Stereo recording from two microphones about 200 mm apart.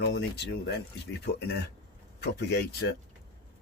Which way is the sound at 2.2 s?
55° left (ahead or behind).